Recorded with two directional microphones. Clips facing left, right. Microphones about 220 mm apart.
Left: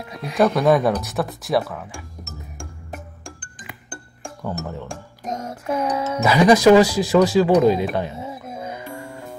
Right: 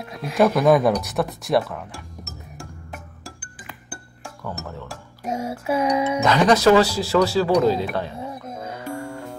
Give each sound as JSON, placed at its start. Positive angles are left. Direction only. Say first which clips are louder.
{"t": 0.0, "sound": "speech", "louder": "even", "side_deg": 0}
{"t": 3.3, "sound": "music", "louder": "left 1 dB", "side_deg": -5}
{"t": 4.8, "sound": "music", "louder": "even", "side_deg": -10}
{"t": 5.9, "sound": "speech", "louder": "right 2 dB", "side_deg": -15}
{"t": 6.2, "sound": "speech", "louder": "left 4 dB", "side_deg": 10}
{"t": 8.2, "sound": "music", "louder": "left 1 dB", "side_deg": 5}